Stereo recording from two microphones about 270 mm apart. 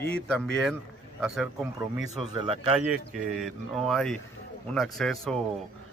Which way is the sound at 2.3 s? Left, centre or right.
Centre.